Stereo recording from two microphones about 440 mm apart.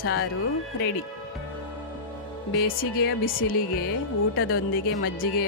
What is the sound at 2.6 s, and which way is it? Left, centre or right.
Speech, left.